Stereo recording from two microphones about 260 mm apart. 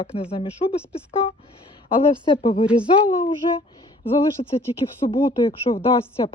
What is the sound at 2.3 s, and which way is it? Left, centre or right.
Speech, centre.